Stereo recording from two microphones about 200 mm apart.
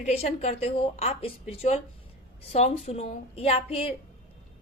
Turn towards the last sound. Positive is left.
turn(degrees=30)  # may be behind; listen again after turning